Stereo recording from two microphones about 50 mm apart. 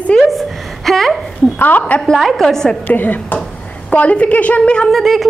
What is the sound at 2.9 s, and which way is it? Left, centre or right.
Speech, left.